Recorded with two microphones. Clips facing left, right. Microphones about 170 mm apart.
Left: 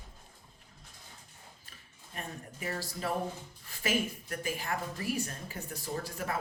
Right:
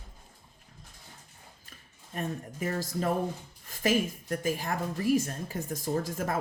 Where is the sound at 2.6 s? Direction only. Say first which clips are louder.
Right 6 dB; 45° right (ahead or behind).